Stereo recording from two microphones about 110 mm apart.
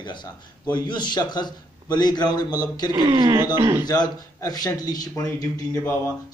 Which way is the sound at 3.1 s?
40° right (ahead or behind).